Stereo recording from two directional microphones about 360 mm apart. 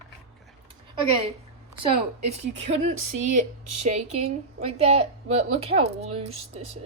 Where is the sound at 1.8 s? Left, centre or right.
Centre.